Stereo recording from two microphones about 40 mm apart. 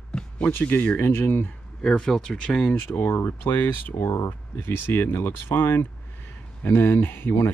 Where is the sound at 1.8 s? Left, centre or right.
Centre.